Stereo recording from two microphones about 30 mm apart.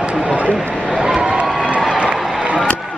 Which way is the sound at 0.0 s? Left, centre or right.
Right.